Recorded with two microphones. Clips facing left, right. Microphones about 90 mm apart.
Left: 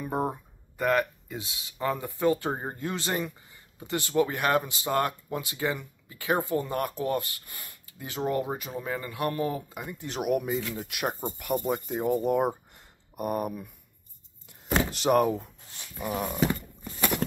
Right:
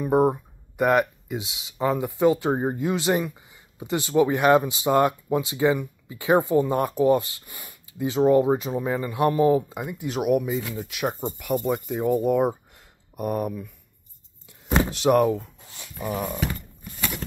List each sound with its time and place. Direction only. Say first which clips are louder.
0.0 s speech: right 10 dB; 15° right (ahead or behind)
9.8 s speech: right 2 dB; 10° right (ahead or behind)
14.9 s speech: right 4 dB; centre (ahead or behind)